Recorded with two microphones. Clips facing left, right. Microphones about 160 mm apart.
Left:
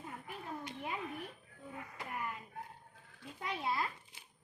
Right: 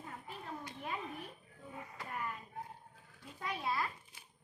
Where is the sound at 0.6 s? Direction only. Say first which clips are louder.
Left 1 dB; 20° left (ahead or behind).